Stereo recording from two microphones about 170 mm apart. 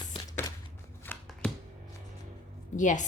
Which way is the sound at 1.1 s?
10° left (ahead or behind).